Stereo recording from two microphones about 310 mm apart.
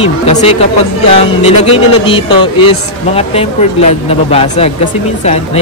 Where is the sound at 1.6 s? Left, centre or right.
Centre.